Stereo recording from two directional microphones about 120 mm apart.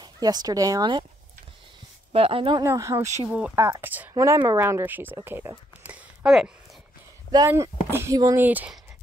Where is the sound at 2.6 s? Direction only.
25° right (ahead or behind).